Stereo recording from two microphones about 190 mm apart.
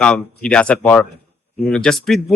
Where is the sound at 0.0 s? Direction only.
5° left (ahead or behind).